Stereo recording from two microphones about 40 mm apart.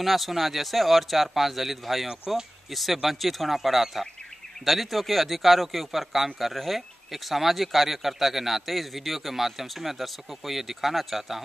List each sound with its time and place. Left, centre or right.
0.0 s speech: centre
2.0 s speech: centre
2.7 s speech: centre